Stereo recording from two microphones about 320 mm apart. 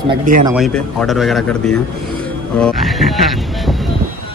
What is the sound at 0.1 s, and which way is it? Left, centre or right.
Speech, right.